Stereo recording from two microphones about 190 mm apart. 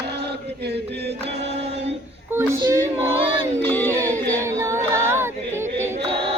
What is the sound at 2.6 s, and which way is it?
Female singing, 15° right (ahead or behind).